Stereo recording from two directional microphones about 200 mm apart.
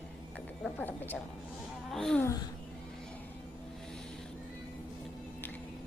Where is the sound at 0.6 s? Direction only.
10° left (ahead or behind).